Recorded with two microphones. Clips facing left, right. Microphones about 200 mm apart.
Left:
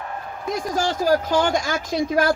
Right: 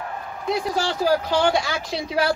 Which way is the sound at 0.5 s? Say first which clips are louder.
Even; 45° left (ahead or behind).